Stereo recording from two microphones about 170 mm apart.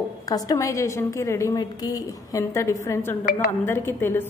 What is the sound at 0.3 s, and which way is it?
A woman's voice, 20° left (ahead or behind).